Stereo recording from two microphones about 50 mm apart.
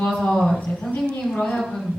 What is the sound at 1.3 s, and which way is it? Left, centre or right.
Speech, centre.